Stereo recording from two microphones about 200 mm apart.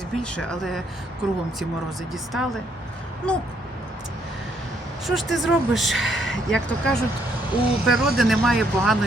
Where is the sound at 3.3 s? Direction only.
5° left (ahead or behind).